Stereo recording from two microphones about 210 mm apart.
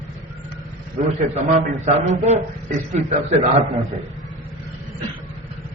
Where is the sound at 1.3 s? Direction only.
35° right (ahead or behind).